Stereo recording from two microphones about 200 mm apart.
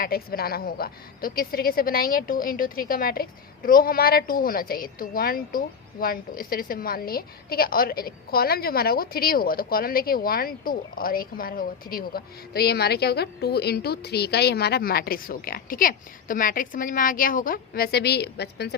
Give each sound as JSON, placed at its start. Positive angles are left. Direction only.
{"t": 0.0, "sound": "a woman's voice", "side_deg": 50}